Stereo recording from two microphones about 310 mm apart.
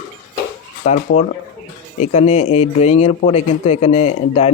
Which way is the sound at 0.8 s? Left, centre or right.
Left.